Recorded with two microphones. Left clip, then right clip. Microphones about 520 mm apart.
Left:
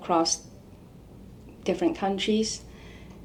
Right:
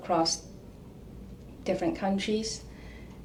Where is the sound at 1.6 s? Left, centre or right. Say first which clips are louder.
Left 3 dB; left.